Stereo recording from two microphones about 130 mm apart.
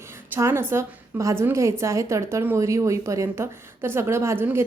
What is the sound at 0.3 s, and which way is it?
Speech, 20° right (ahead or behind).